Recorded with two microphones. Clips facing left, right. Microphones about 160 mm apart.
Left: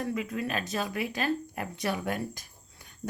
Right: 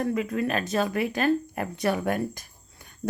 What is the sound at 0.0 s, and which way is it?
A woman's voice, 50° right (ahead or behind).